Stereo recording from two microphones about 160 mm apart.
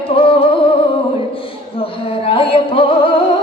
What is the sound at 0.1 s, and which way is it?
Music, 35° left (ahead or behind).